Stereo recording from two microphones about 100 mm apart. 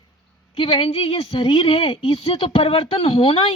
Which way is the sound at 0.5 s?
65° left (ahead or behind).